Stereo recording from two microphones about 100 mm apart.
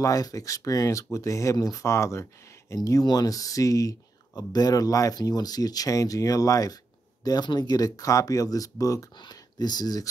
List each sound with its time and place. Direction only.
0.0 s speech: 35° left (ahead or behind)